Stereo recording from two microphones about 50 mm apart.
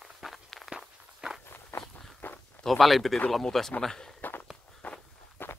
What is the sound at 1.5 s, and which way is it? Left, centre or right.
Walk, left.